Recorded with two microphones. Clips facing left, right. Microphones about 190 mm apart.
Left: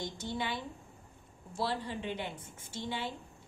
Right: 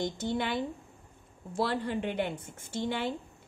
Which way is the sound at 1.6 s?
60° right (ahead or behind).